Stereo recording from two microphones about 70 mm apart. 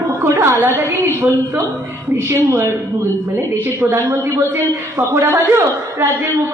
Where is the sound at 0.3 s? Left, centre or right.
Right.